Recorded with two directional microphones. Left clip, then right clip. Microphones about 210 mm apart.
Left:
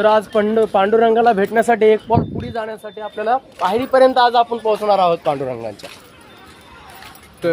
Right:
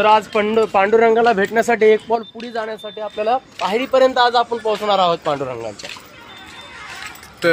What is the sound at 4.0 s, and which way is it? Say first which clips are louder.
Speech: left 2 dB; 25° left (ahead or behind).